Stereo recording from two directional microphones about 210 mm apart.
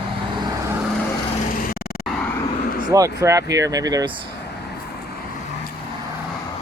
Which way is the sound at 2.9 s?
15° right (ahead or behind).